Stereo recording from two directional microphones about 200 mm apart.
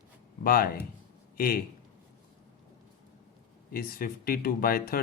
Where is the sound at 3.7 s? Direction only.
45° left (ahead or behind).